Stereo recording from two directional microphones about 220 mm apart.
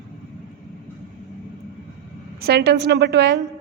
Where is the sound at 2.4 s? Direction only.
45° right (ahead or behind).